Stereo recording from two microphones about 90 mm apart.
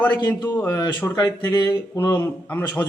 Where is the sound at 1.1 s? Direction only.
35° left (ahead or behind).